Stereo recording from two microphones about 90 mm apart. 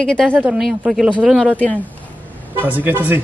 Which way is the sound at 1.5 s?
15° left (ahead or behind).